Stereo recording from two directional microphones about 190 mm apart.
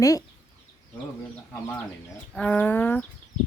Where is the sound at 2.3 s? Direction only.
10° left (ahead or behind).